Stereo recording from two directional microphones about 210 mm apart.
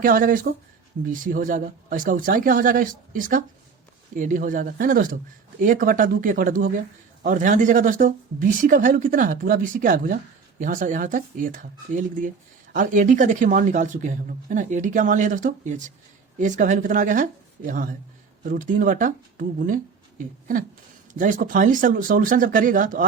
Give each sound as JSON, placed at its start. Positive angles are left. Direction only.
{"t": 0.0, "sound": "a man's voice", "side_deg": -40}